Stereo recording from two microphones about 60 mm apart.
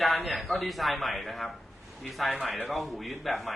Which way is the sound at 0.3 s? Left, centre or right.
Centre.